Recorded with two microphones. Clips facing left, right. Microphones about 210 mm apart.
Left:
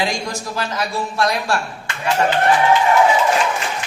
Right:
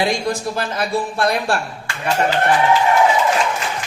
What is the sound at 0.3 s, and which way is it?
Speech, 55° right (ahead or behind).